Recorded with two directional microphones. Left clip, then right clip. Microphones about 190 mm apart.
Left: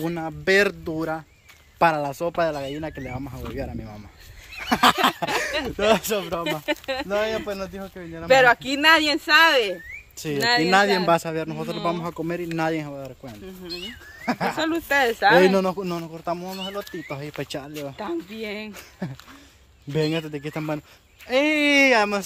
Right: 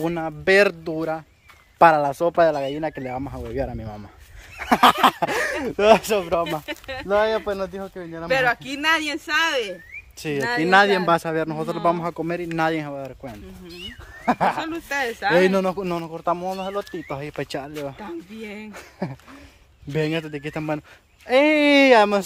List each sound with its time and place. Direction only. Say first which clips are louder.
0.0 s speech: right 3 dB; 15° right (ahead or behind)
1.8 s speech: right 5 dB; 25° right (ahead or behind)
6.6 s speech: left 5 dB; 25° left (ahead or behind)
7.1 s speech: right 6 dB; 20° right (ahead or behind)
8.3 s speech: left 5 dB; 25° left (ahead or behind)
10.6 s speech: right 6 dB; 10° right (ahead or behind); by 12.0 s 35° right (ahead or behind)
12.0 s speech: right 2 dB; 15° right (ahead or behind)
14.7 s speech: left 5 dB; 20° left (ahead or behind)
15.3 s speech: left 1 dB; centre (ahead or behind)
17.9 s speech: left 5 dB; 15° left (ahead or behind)
18.7 s speech: right 4 dB; 25° right (ahead or behind)
19.9 s a man's voice: even; 5° right (ahead or behind)
21.3 s speech: right 3 dB; 25° right (ahead or behind)